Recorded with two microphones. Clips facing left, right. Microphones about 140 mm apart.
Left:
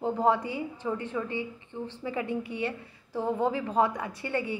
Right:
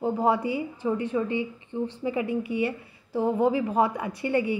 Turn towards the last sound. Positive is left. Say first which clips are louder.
# right 6 dB
turn(degrees=-15)  # may be behind; listen again after turning